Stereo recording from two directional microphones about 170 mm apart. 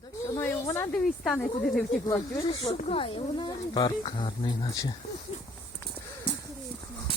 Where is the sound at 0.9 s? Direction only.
5° left (ahead or behind).